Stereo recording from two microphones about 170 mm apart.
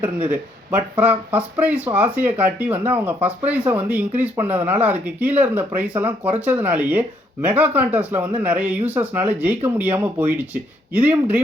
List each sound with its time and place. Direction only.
0.0 s speech: 10° right (ahead or behind)